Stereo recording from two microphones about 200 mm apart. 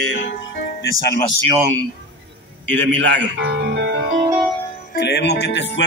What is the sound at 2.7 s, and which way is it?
A man's voice, 65° right (ahead or behind).